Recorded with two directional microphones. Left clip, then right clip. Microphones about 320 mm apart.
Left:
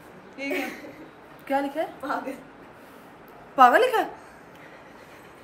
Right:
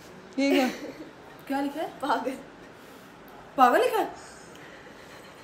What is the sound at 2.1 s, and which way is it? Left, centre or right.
Speech, right.